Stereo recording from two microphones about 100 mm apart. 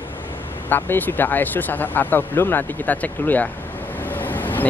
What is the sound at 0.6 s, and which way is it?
Speech, 20° left (ahead or behind).